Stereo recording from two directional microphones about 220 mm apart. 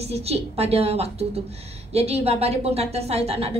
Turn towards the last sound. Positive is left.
turn(degrees=-30)  # may be behind; listen again after turning